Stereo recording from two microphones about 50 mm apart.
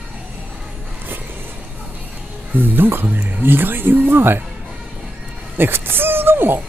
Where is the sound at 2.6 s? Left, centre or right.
Right.